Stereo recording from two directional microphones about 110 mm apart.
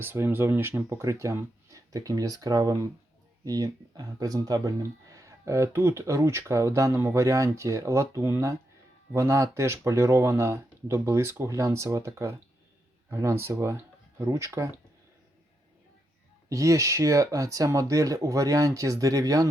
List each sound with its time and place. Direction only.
0.0 s speech: 20° right (ahead or behind)
16.5 s speech: 30° right (ahead or behind)